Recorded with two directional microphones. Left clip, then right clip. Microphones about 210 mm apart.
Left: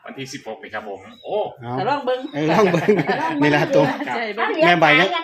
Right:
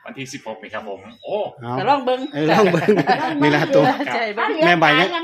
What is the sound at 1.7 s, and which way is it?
Speech, 50° right (ahead or behind).